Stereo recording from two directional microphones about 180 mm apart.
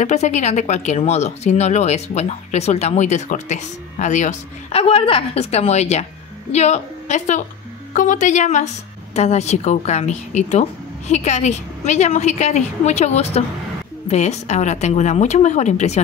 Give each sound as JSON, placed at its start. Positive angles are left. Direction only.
{"t": 0.0, "sound": "a woman's voice", "side_deg": 40}